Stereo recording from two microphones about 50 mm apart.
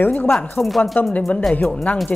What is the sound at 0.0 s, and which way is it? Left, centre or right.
Speech, left.